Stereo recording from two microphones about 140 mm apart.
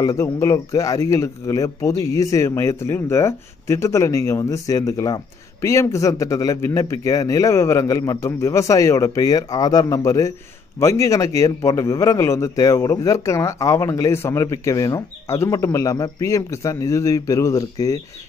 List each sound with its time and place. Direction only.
0.0 s speech: 25° left (ahead or behind)